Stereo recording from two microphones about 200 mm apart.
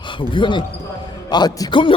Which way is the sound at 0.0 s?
25° left (ahead or behind).